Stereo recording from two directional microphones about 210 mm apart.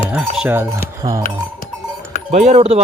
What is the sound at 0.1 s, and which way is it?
Speech, 5° right (ahead or behind).